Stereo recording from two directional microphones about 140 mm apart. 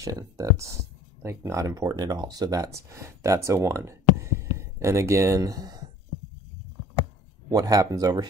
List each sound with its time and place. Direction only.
0.0 s speech: 25° right (ahead or behind)
7.4 s speech: 25° right (ahead or behind)